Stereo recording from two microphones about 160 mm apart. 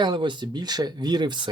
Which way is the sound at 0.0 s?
30° right (ahead or behind).